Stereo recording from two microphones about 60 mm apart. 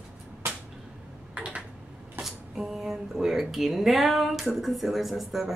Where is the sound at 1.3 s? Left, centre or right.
Right.